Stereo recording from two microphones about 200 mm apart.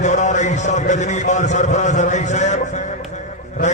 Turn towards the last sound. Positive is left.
turn(degrees=35)  # may be behind; listen again after turning